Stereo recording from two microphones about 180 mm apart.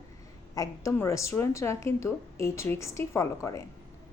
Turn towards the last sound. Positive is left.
turn(degrees=15)  # may be behind; listen again after turning